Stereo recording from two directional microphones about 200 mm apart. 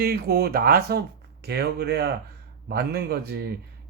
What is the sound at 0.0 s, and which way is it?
A man's voice, 50° right (ahead or behind).